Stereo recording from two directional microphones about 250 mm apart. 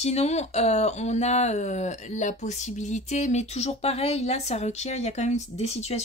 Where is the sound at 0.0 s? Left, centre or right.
Left.